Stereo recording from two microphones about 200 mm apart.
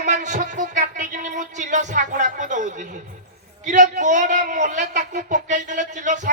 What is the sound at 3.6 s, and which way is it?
A man's voice, 40° right (ahead or behind).